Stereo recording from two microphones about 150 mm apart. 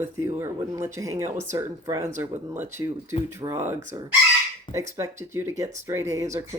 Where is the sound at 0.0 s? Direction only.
20° right (ahead or behind).